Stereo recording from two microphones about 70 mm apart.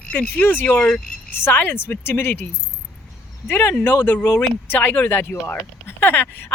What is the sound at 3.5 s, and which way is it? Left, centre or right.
Speech, left.